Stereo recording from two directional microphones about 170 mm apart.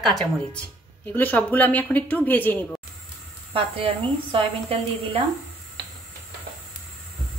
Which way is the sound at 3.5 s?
30° right (ahead or behind).